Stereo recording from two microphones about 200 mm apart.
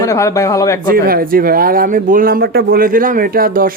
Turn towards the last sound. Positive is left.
turn(degrees=-45)  # may be behind; listen again after turning